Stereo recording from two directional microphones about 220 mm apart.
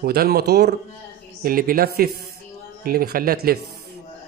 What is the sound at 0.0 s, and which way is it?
Speech, 45° right (ahead or behind).